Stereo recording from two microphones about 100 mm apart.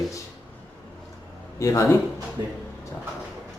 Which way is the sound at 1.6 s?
30° left (ahead or behind).